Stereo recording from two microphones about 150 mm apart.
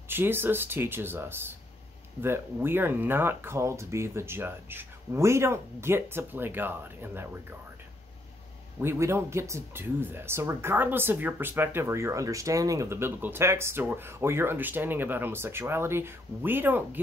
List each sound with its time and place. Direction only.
0.1 s speech: 15° right (ahead or behind)
8.8 s speech: 20° right (ahead or behind)